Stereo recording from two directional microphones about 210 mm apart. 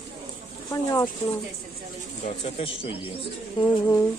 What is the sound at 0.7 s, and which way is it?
Speech, 15° left (ahead or behind).